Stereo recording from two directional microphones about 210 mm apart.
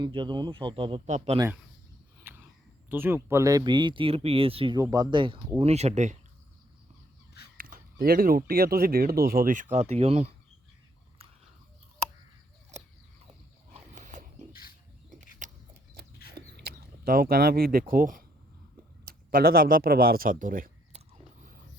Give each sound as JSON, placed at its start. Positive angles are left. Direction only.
{"t": 0.0, "sound": "speech", "side_deg": -20}
{"t": 2.3, "sound": "a sound", "side_deg": -10}
{"t": 2.9, "sound": "speech", "side_deg": -10}
{"t": 7.6, "sound": "speech", "side_deg": -45}
{"t": 11.2, "sound": "biting", "side_deg": -25}
{"t": 12.7, "sound": "a sound", "side_deg": -30}
{"t": 19.0, "sound": "a man's voice", "side_deg": -45}